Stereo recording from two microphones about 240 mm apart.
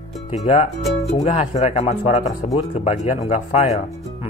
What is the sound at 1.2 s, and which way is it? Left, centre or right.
Speech, left.